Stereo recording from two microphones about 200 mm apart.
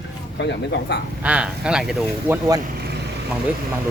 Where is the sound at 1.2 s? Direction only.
5° right (ahead or behind).